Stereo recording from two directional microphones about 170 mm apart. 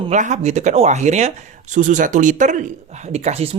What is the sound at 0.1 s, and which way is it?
Speech, 45° right (ahead or behind).